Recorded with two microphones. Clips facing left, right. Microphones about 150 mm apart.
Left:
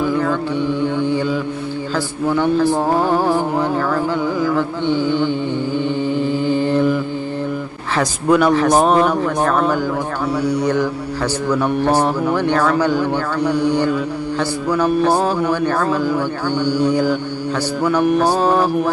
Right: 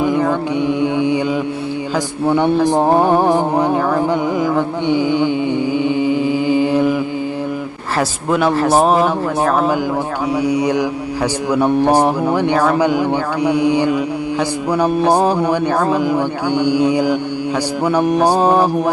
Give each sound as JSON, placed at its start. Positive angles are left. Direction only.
{"t": 0.0, "sound": "mantra", "side_deg": -15}
{"t": 2.2, "sound": "speech", "side_deg": -20}
{"t": 5.7, "sound": "mantra", "side_deg": -10}
{"t": 7.9, "sound": "speech", "side_deg": -5}
{"t": 10.4, "sound": "mantra", "side_deg": -10}